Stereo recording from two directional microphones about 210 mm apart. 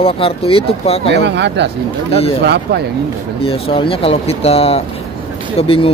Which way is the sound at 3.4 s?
25° left (ahead or behind).